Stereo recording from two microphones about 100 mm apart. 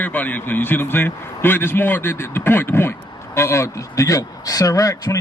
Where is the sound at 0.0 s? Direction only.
15° left (ahead or behind).